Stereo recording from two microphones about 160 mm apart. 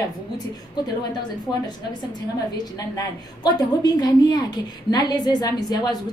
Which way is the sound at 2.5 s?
25° left (ahead or behind).